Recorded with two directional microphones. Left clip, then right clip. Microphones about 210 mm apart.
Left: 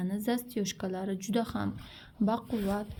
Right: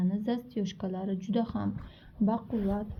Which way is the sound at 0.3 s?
50° left (ahead or behind).